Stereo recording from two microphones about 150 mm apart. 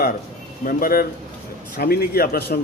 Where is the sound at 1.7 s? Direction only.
90° left.